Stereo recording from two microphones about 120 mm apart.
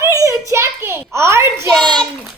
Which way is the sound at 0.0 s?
25° right (ahead or behind).